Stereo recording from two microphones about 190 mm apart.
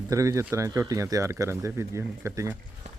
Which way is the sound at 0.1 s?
15° right (ahead or behind).